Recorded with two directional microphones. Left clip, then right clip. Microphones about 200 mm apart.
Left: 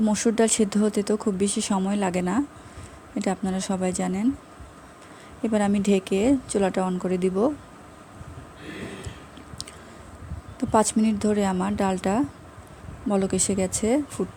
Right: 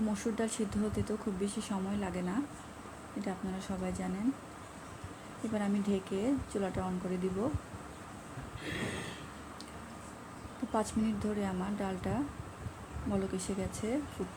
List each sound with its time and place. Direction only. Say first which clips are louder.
0.1 s speech: left 14 dB; 65° left (ahead or behind)
5.5 s speech: left 12 dB; 75° left (ahead or behind)
10.7 s speech: left 13 dB; 70° left (ahead or behind)